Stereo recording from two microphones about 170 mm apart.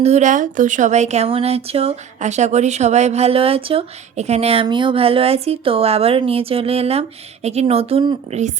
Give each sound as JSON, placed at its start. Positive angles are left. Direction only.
{"t": 0.0, "sound": "speech", "side_deg": -45}